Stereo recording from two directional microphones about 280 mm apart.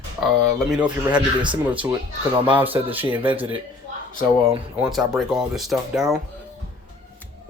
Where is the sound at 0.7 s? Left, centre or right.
Centre.